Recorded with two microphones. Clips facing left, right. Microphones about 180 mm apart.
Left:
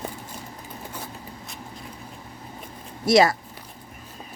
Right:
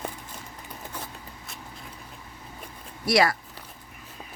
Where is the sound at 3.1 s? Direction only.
25° left (ahead or behind).